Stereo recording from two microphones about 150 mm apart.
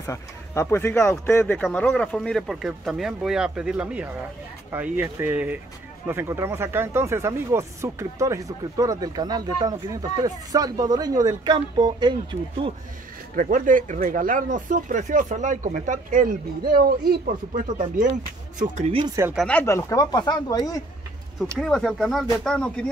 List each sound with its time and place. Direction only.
0.0 s speech: 20° left (ahead or behind); by 12.7 s 35° right (ahead or behind)
13.4 s speech: 60° right (ahead or behind)
17.6 s speech: 60° right (ahead or behind)
19.3 s speech: 5° left (ahead or behind)
19.6 s speech: 20° left (ahead or behind)
21.5 s speech: centre (ahead or behind)